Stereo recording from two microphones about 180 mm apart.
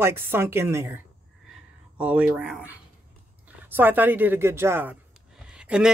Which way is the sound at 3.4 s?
10° right (ahead or behind).